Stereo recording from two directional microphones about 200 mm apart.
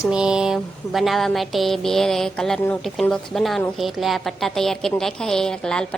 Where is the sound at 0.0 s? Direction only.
5° right (ahead or behind).